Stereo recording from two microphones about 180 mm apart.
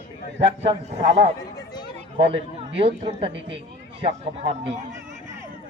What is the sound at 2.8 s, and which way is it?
Speech, 35° right (ahead or behind).